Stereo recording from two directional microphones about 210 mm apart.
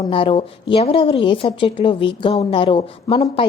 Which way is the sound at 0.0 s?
25° left (ahead or behind).